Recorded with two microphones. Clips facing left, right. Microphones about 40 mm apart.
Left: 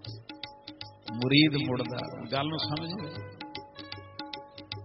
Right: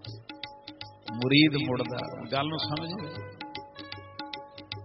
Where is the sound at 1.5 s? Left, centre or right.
Centre.